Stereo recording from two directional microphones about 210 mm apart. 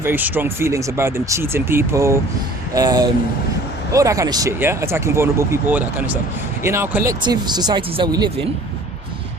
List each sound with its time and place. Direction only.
0.0 s speech: 10° right (ahead or behind)